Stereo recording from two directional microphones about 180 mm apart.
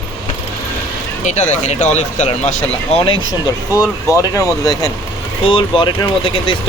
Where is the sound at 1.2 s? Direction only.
40° left (ahead or behind).